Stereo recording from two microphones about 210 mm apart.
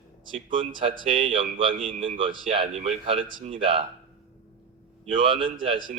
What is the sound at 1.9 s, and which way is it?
Speech, 25° right (ahead or behind).